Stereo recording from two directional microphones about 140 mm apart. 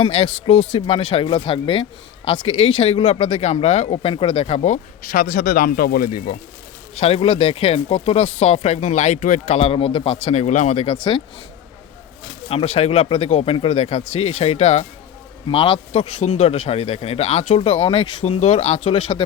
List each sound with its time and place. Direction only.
0.0 s speech: 45° left (ahead or behind); by 6.3 s 90° left
6.9 s speech: 45° left (ahead or behind)
10.8 s speech: 35° left (ahead or behind)
12.5 s speech: 45° left (ahead or behind)
15.4 s speech: 40° left (ahead or behind)